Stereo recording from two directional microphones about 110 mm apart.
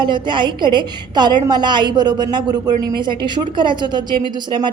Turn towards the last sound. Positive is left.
turn(degrees=-45)  # may be behind; listen again after turning